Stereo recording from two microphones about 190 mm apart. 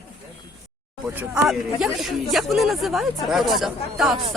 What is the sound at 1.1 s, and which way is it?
Speech, 5° right (ahead or behind).